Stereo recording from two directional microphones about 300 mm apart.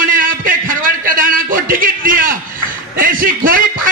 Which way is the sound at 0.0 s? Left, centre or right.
Right.